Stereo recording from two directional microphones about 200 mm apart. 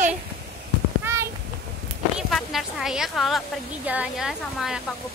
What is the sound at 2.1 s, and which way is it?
A woman's voice, centre (ahead or behind).